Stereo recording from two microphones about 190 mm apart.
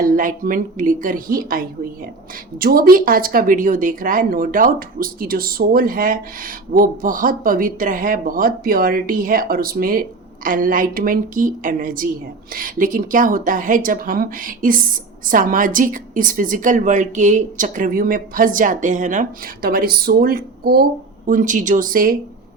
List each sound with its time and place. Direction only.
0.0 s speech: 45° right (ahead or behind)